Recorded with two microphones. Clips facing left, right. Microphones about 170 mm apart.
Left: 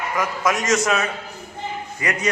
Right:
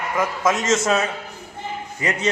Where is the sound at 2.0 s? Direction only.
25° right (ahead or behind).